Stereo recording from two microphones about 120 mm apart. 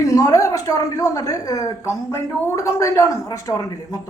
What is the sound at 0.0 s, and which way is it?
Speech, 25° left (ahead or behind).